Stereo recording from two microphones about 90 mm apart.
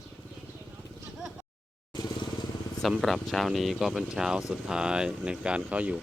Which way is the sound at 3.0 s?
Centre (ahead or behind).